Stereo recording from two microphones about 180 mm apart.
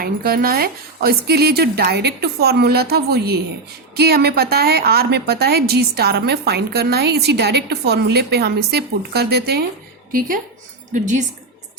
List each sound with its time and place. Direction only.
0.0 s a woman's voice: 55° right (ahead or behind)
10.1 s a woman's voice: 50° right (ahead or behind)